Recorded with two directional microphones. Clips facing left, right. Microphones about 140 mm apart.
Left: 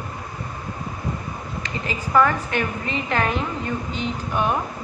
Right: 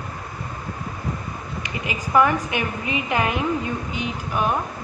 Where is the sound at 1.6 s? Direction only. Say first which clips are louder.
Even; 15° right (ahead or behind).